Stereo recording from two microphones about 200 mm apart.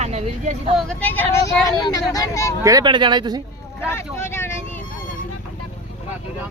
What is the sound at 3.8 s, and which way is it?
Vehicle, 10° left (ahead or behind).